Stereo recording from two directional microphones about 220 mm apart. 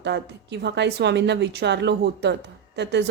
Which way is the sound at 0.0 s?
50° right (ahead or behind).